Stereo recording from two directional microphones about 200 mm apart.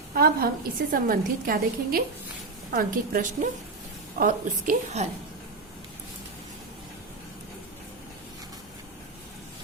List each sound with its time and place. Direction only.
0.1 s a woman's voice: 50° right (ahead or behind)